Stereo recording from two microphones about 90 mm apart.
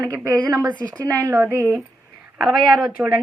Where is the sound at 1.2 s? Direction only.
30° right (ahead or behind).